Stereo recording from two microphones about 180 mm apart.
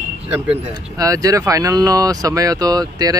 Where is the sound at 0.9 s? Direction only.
20° right (ahead or behind).